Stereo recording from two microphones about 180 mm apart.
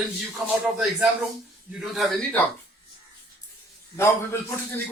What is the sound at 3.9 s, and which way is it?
Speech, 15° left (ahead or behind).